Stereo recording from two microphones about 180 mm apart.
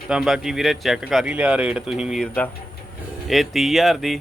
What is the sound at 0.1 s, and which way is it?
Speech, centre (ahead or behind).